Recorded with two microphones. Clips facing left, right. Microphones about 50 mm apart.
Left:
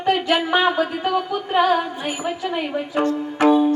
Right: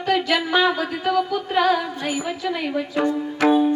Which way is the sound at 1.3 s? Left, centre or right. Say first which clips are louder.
Left 1 dB; left.